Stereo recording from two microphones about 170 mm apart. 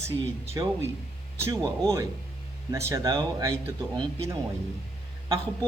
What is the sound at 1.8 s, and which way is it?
Speech, 20° right (ahead or behind).